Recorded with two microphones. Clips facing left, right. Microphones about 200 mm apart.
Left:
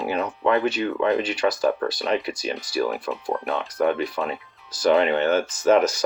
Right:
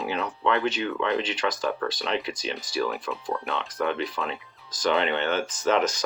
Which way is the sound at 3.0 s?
35° left (ahead or behind).